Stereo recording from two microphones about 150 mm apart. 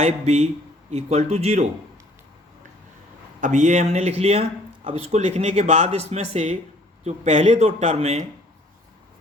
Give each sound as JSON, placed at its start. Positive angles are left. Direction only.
{"t": 0.0, "sound": "speech", "side_deg": -45}
{"t": 3.4, "sound": "speech", "side_deg": -55}